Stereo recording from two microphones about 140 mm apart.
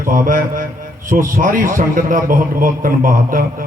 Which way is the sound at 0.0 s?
75° right (ahead or behind).